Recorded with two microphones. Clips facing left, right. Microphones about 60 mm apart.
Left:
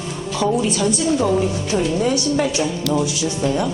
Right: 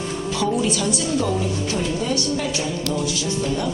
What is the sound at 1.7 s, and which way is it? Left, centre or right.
A woman's voice, left.